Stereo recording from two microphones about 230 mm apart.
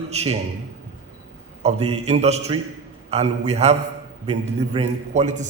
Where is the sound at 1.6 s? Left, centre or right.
Right.